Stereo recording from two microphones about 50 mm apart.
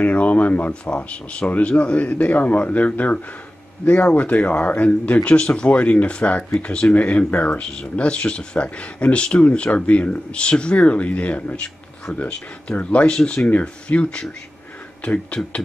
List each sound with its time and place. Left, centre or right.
0.0 s speech: left